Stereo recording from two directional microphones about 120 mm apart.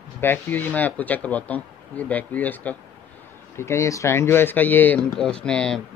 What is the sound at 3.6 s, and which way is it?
Speech, 25° left (ahead or behind).